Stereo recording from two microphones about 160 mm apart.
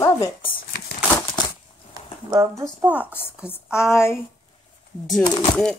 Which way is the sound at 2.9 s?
10° right (ahead or behind).